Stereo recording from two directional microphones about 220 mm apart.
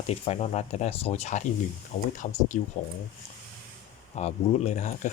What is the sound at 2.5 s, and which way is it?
Speech, 35° left (ahead or behind).